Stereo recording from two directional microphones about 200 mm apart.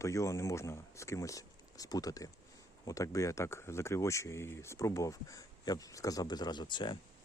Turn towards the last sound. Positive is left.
turn(degrees=25)  # may be behind; listen again after turning